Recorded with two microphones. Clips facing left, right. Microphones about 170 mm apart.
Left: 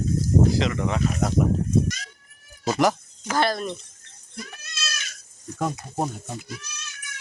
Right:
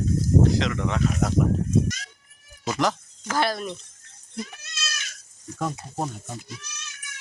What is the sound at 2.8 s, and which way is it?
Speech, 10° left (ahead or behind).